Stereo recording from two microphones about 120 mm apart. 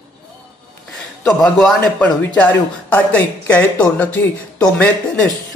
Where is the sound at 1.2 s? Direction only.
10° left (ahead or behind).